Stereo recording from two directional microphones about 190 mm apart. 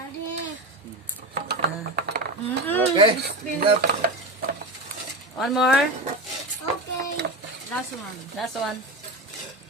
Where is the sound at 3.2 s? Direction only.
50° right (ahead or behind).